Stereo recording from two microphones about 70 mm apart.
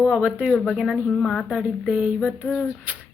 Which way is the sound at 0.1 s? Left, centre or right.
Centre.